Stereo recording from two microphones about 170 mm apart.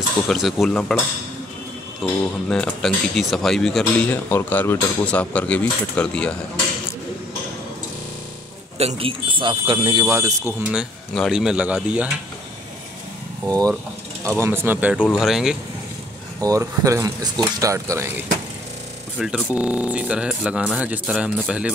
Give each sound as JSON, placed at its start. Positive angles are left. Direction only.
{"t": 0.3, "sound": "speech", "side_deg": 0}
{"t": 2.0, "sound": "speech", "side_deg": 0}
{"t": 8.7, "sound": "a man's voice", "side_deg": -35}
{"t": 10.0, "sound": "speech", "side_deg": -15}
{"t": 10.7, "sound": "speech", "side_deg": 0}
{"t": 13.5, "sound": "speech", "side_deg": -20}
{"t": 16.3, "sound": "speech", "side_deg": -20}
{"t": 19.1, "sound": "speech", "side_deg": -5}